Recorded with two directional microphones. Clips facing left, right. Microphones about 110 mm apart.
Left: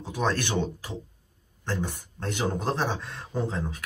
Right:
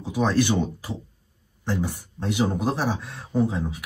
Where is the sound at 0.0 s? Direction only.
15° right (ahead or behind).